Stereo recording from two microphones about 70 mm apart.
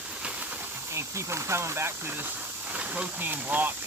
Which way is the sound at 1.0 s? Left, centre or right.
Right.